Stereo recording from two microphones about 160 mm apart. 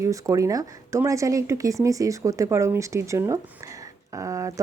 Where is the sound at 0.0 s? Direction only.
20° right (ahead or behind).